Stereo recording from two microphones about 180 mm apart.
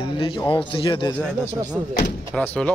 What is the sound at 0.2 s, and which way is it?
Speech, 25° left (ahead or behind).